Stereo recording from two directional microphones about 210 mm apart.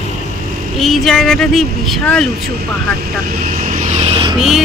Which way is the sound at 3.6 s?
35° right (ahead or behind).